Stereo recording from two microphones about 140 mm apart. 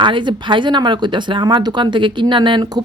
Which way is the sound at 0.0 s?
35° right (ahead or behind).